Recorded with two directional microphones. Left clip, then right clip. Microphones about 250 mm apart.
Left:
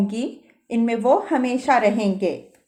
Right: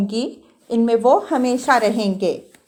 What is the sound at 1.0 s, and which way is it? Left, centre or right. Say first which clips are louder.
Speech: even; right.